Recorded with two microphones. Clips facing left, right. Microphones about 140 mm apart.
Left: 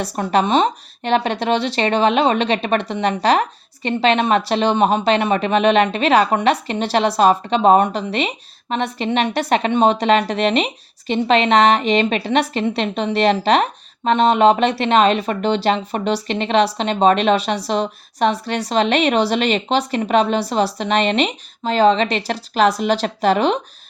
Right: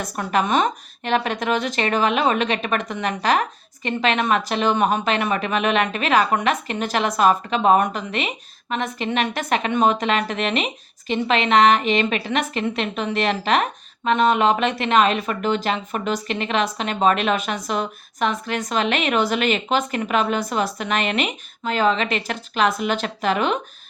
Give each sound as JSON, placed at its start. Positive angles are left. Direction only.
{"t": 0.0, "sound": "a woman's voice", "side_deg": 30}